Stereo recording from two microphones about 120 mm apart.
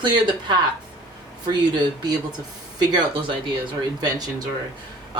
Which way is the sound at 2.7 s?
35° right (ahead or behind).